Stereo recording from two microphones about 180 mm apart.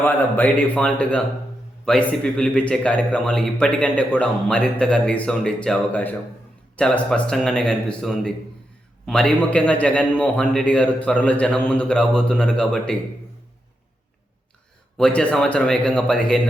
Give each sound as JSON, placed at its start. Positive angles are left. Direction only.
{"t": 0.0, "sound": "a man's voice", "side_deg": 10}
{"t": 14.9, "sound": "a man's voice", "side_deg": 5}